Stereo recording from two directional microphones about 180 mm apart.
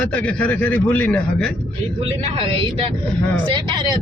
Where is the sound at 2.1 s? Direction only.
35° right (ahead or behind).